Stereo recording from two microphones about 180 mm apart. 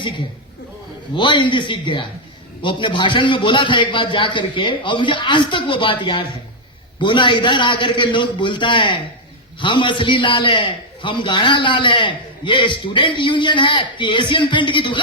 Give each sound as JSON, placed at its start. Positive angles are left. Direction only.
{"t": 1.1, "sound": "a man's voice", "side_deg": 25}